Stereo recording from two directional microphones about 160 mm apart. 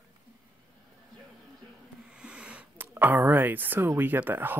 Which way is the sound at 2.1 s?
5° right (ahead or behind).